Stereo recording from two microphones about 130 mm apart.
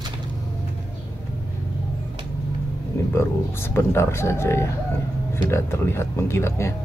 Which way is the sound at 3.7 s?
20° left (ahead or behind).